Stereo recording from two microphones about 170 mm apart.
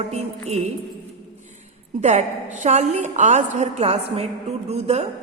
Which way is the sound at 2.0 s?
45° right (ahead or behind).